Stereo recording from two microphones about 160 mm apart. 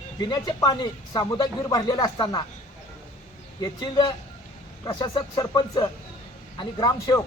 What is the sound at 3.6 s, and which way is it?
Speech, 25° left (ahead or behind).